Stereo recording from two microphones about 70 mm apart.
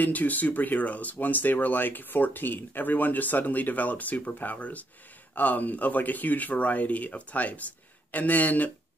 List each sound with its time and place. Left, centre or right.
0.0 s speech: left